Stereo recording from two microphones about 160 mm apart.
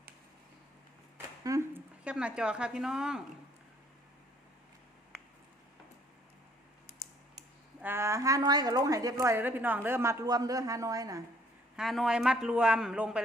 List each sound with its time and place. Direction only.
1.5 s a sound: 20° right (ahead or behind)
2.0 s a man's voice: 5° right (ahead or behind)
7.8 s a woman's voice: 15° right (ahead or behind)
11.8 s a man's voice: centre (ahead or behind)